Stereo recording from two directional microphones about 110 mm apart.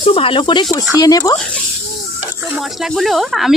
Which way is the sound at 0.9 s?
30° left (ahead or behind).